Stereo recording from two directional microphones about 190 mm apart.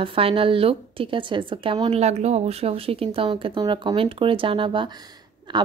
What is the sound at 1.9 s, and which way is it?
Speech, 35° right (ahead or behind).